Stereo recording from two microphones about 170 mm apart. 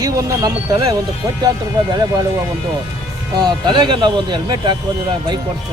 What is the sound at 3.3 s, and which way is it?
Speech, 25° right (ahead or behind).